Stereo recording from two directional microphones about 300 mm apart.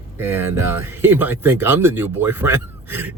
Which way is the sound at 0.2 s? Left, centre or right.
Centre.